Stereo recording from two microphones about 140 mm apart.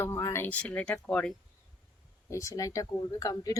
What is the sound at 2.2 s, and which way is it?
Speech, 25° left (ahead or behind).